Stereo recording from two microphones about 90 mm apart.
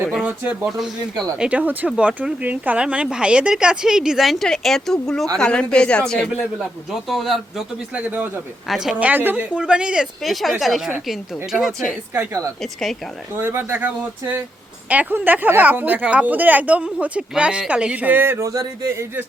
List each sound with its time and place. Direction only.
0.3 s speech: 20° right (ahead or behind); by 6.2 s 10° left (ahead or behind)
6.9 s a man's voice: centre (ahead or behind)
7.9 s speech: 15° right (ahead or behind)
8.6 s a man's voice: 5° right (ahead or behind)
9.0 s a man's voice: 20° right (ahead or behind); by 10.9 s centre (ahead or behind)
12.1 s speech: 30° right (ahead or behind)